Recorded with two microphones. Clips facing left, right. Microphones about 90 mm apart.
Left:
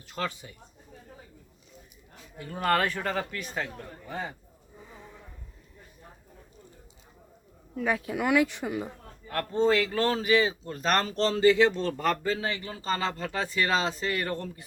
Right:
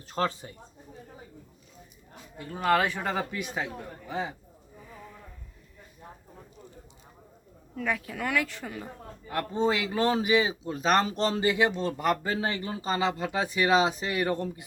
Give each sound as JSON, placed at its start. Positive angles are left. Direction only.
{"t": 0.1, "sound": "speech", "side_deg": -35}
{"t": 2.4, "sound": "speech", "side_deg": 0}
{"t": 4.9, "sound": "a sound", "side_deg": 20}
{"t": 7.8, "sound": "speech", "side_deg": 10}
{"t": 9.2, "sound": "speech", "side_deg": -10}
{"t": 12.8, "sound": "speech", "side_deg": -10}